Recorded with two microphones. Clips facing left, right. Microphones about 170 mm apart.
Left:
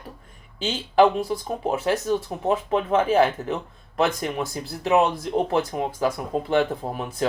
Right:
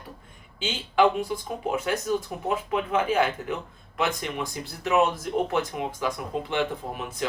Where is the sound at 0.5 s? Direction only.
40° left (ahead or behind).